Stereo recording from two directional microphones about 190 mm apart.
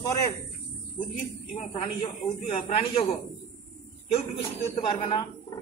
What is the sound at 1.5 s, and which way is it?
A man's voice, 35° left (ahead or behind).